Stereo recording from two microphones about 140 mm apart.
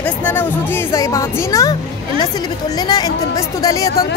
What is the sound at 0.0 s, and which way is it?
A woman's voice, 10° left (ahead or behind).